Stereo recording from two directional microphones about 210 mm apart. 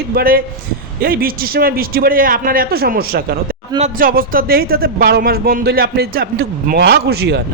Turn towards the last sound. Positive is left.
turn(degrees=-50)  # may be behind; listen again after turning